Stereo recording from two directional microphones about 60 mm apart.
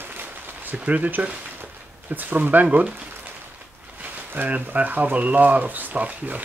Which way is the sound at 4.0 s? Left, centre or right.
Right.